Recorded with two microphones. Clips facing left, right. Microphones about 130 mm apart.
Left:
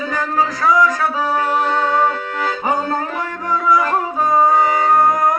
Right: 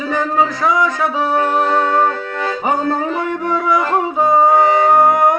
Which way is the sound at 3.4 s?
25° right (ahead or behind).